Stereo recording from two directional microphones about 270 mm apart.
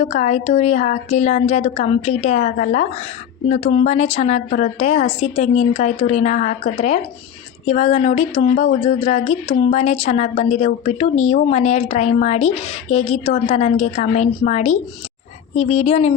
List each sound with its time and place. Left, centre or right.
0.0 s speech: left